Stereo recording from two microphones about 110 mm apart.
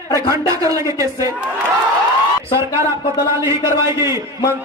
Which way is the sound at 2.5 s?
25° right (ahead or behind).